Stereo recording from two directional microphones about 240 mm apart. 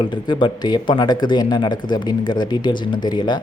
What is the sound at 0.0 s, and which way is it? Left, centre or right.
Speech, centre.